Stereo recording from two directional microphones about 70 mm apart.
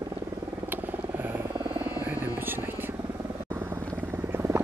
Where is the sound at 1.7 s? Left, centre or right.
Right.